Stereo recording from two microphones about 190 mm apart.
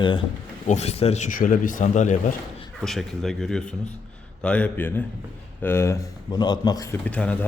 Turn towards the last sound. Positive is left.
turn(degrees=5)  # may be behind; listen again after turning